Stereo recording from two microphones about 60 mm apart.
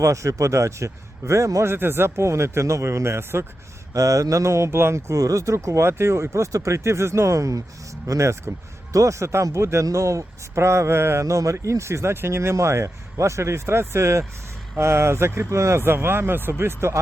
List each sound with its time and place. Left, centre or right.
0.0 s speech: right
1.6 s speech: right
3.9 s speech: right